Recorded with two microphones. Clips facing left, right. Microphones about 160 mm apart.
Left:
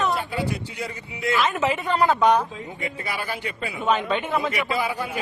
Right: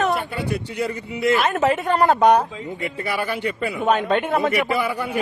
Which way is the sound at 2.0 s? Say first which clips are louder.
Right 3 dB; 55° right (ahead or behind).